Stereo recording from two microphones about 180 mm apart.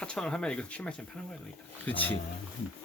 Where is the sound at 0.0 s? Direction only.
5° left (ahead or behind).